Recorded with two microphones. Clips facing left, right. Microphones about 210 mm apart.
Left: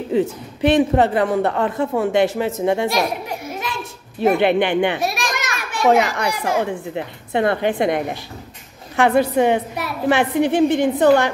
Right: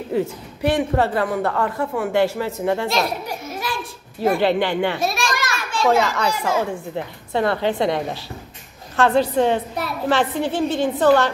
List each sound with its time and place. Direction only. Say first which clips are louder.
0.1 s a woman's voice: left 3 dB; 20° left (ahead or behind)
8.9 s a woman's voice: left 1 dB; 10° left (ahead or behind)